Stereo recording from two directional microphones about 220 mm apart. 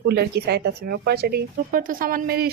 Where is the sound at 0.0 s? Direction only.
50° right (ahead or behind).